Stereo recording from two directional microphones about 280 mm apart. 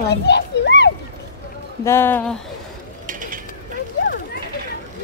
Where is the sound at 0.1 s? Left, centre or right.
Left.